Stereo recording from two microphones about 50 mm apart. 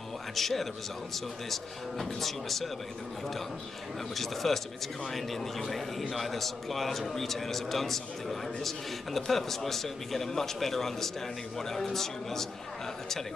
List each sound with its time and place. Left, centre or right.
0.4 s a man's voice: centre
4.1 s a man's voice: centre